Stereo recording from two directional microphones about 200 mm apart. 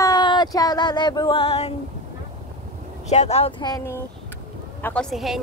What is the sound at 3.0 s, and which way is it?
Speech, 35° left (ahead or behind).